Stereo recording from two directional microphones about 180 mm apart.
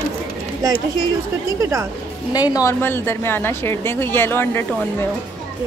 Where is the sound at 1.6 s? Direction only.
15° right (ahead or behind).